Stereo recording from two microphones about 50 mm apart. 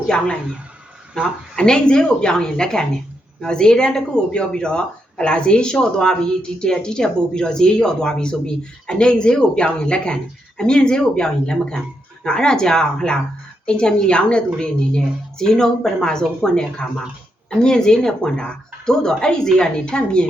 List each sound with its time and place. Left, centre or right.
1.2 s a woman's voice: centre